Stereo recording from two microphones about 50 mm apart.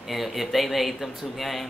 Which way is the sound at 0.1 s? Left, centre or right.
Centre.